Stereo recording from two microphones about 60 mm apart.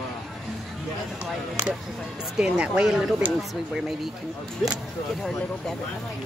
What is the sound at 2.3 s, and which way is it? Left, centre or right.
Speech, centre.